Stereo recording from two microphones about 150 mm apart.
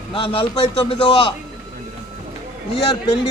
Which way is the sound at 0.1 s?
35° left (ahead or behind).